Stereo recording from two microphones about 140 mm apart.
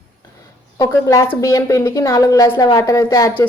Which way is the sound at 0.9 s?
25° left (ahead or behind).